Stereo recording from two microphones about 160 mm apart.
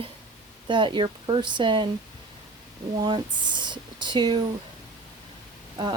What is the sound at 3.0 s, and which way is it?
Speech, 30° right (ahead or behind).